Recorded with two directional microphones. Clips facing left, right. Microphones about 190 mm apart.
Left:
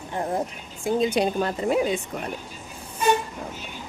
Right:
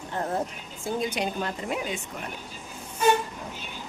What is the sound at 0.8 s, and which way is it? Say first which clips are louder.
A woman's voice: left 7 dB; 25° left (ahead or behind).